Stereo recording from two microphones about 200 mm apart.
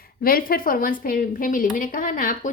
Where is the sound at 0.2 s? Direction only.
45° left (ahead or behind).